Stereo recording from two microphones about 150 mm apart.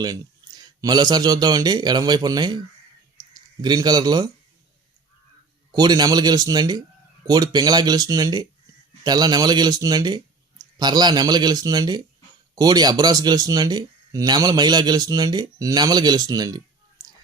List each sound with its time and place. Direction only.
0.0 s speech: 25° right (ahead or behind)
5.7 s speech: 25° right (ahead or behind)